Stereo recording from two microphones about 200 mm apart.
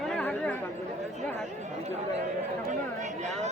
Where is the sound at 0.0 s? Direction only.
5° left (ahead or behind).